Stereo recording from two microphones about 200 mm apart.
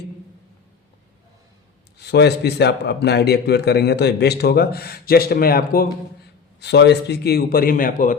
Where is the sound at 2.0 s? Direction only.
55° left (ahead or behind).